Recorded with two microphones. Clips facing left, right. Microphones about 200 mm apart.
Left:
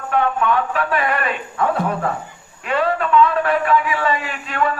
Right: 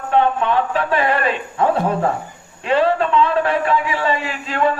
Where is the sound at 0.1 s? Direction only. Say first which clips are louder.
Right 2 dB; 25° right (ahead or behind).